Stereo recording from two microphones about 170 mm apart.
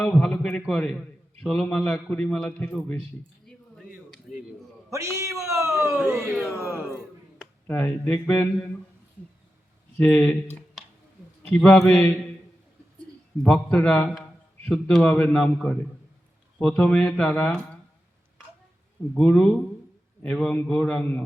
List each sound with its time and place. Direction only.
0.0 s a sound: 5° left (ahead or behind)
0.6 s a man's voice: 5° left (ahead or behind)
3.4 s a sound: centre (ahead or behind)
4.9 s a sound: 15° right (ahead or behind)
6.1 s speech: 15° right (ahead or behind)
7.7 s speech: 10° left (ahead or behind)
10.0 s speech: 5° left (ahead or behind)
13.4 s a man's voice: 5° left (ahead or behind)
19.1 s a man's voice: 5° left (ahead or behind)